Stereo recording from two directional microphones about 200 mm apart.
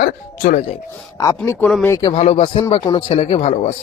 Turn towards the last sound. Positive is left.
turn(degrees=30)  # may be behind; listen again after turning